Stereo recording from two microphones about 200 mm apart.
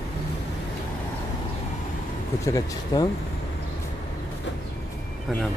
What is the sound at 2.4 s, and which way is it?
Speech, 20° left (ahead or behind).